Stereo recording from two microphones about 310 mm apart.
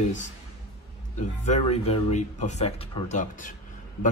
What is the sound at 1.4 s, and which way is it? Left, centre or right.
A man's voice, left.